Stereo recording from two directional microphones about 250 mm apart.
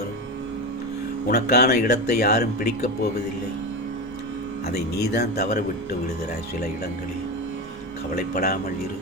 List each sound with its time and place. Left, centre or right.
1.3 s speech: left
4.6 s speech: left
8.1 s speech: left